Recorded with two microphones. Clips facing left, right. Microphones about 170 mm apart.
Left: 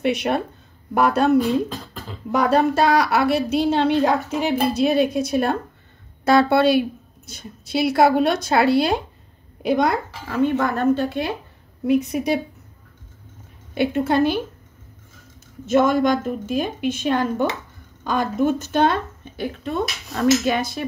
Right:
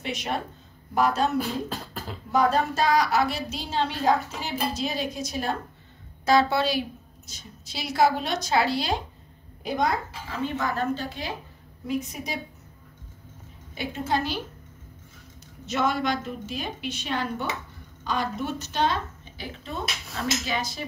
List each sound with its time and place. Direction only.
0.0 s a woman's voice: 60° left (ahead or behind)
1.7 s beatboxing: 10° right (ahead or behind)
2.3 s a woman's voice: 70° left (ahead or behind)
10.4 s a woman's voice: 55° left (ahead or behind)
13.7 s a woman's voice: 60° left (ahead or behind)
15.6 s a woman's voice: 50° left (ahead or behind)